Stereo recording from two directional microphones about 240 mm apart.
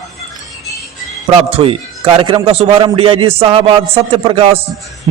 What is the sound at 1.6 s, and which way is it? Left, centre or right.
A man's voice, right.